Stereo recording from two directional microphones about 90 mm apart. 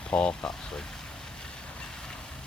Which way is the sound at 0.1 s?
10° left (ahead or behind).